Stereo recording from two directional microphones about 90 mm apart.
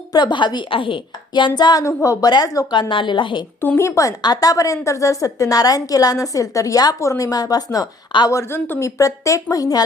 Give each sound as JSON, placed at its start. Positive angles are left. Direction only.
{"t": 0.1, "sound": "a woman's voice", "side_deg": 55}
{"t": 1.8, "sound": "a woman's voice", "side_deg": 30}
{"t": 2.2, "sound": "speech", "side_deg": 45}
{"t": 2.9, "sound": "a woman's voice", "side_deg": 70}
{"t": 3.6, "sound": "a woman's voice", "side_deg": 25}
{"t": 4.2, "sound": "a woman's voice", "side_deg": 45}
{"t": 8.3, "sound": "speech", "side_deg": 30}
{"t": 8.8, "sound": "a woman's voice", "side_deg": 35}